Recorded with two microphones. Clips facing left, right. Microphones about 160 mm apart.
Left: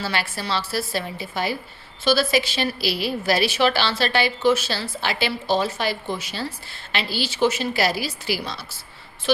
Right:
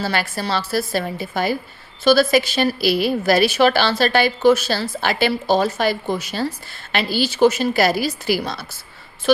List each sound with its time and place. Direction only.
0.0 s a woman's voice: 45° right (ahead or behind)